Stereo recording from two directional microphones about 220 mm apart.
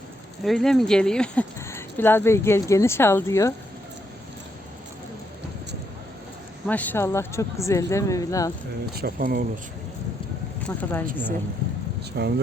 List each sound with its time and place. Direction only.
0.4 s speech: centre (ahead or behind)
6.7 s speech: 5° left (ahead or behind)
9.0 s speech: 40° right (ahead or behind)
10.6 s speech: 5° left (ahead or behind)
12.1 s speech: 50° right (ahead or behind)